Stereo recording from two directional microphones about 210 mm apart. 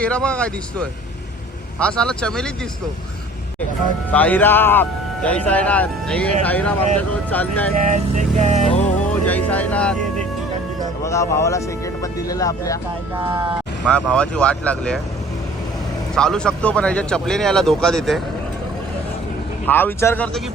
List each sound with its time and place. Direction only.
0.0 s speech: 5° left (ahead or behind)
4.1 s speech: 5° left (ahead or behind)
7.8 s speech: 35° right (ahead or behind)
9.0 s speech: 5° left (ahead or behind)
11.0 s speech: 15° left (ahead or behind)
13.1 s speech: 10° right (ahead or behind)
13.9 s speech: 5° left (ahead or behind)
16.1 s speech: 5° left (ahead or behind)
19.6 s speech: 10° left (ahead or behind)